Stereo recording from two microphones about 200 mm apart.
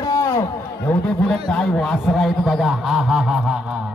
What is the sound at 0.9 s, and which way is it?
A man's voice, 5° left (ahead or behind).